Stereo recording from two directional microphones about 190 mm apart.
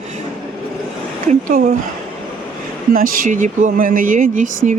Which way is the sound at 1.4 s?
45° right (ahead or behind).